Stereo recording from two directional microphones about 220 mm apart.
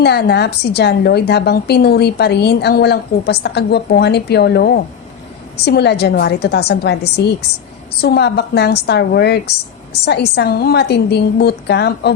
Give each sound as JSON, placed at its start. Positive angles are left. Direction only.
{"t": 0.0, "sound": "a woman's voice", "side_deg": 50}